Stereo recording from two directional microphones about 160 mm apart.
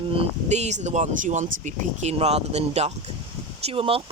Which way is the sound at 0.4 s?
45° right (ahead or behind).